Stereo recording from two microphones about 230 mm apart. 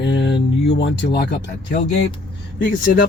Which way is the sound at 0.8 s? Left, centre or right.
Left.